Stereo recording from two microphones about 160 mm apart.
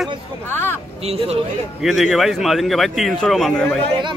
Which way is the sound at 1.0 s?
40° right (ahead or behind).